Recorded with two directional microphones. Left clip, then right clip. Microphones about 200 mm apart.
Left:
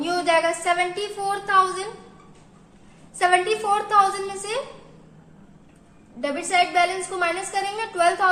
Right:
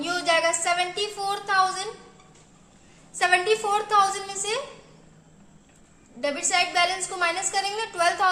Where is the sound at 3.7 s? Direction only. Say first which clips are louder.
Left 4 dB; 25° right (ahead or behind).